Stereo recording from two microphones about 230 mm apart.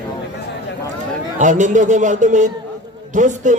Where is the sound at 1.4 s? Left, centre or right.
Right.